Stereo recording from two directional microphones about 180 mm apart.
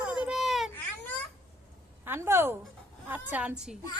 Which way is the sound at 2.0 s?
15° right (ahead or behind).